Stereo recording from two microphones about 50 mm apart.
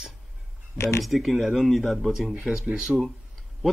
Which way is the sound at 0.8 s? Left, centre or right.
Left.